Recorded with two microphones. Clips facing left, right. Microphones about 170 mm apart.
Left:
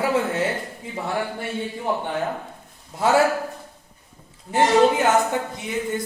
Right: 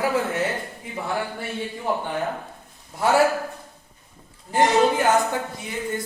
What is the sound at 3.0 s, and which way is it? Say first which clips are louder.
Speech: left 1 dB; 25° left (ahead or behind).